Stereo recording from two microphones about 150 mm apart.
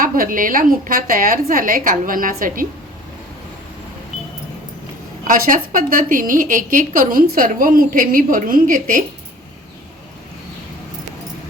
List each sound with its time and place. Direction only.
0.0 s a woman's voice: 70° right (ahead or behind)
5.2 s a woman's voice: 60° right (ahead or behind)